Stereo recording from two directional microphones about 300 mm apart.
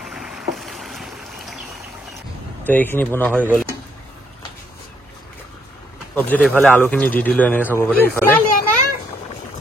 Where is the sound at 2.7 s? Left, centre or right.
Centre.